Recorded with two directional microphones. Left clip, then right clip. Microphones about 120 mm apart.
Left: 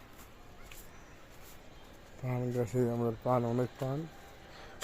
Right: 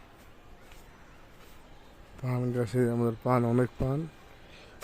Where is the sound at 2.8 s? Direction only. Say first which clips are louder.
Right 4 dB; 90° right.